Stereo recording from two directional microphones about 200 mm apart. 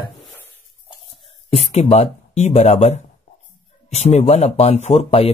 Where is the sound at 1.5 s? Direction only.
30° left (ahead or behind).